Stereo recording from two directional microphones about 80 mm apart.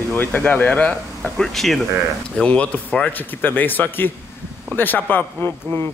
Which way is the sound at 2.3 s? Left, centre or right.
Centre.